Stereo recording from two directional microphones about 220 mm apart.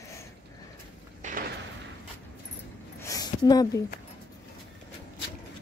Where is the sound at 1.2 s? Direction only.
35° right (ahead or behind).